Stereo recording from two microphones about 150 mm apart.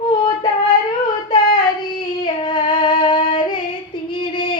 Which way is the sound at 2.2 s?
30° left (ahead or behind).